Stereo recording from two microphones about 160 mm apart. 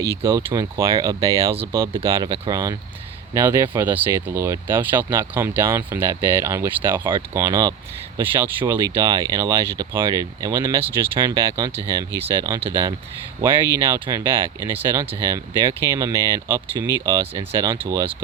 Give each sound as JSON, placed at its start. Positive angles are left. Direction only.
{"t": 0.3, "sound": "speech", "side_deg": -20}